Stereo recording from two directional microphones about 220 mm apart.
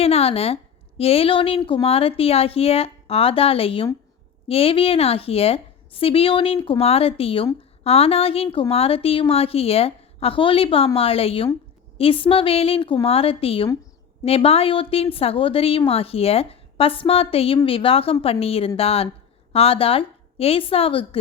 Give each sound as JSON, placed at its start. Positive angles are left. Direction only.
{"t": 0.0, "sound": "a woman's voice", "side_deg": 25}